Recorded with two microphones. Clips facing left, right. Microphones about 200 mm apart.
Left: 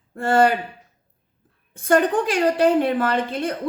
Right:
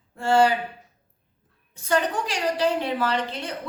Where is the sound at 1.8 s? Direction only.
55° left (ahead or behind).